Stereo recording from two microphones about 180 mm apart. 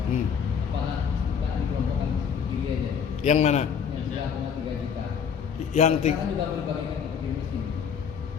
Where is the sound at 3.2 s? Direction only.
40° left (ahead or behind).